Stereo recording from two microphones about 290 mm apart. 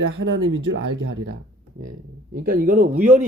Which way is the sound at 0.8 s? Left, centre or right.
Right.